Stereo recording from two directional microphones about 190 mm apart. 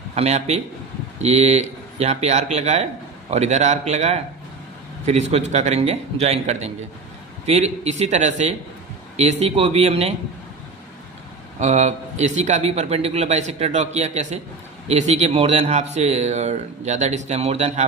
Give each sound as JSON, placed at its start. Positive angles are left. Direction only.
{"t": 0.2, "sound": "speech", "side_deg": -35}
{"t": 11.6, "sound": "speech", "side_deg": -35}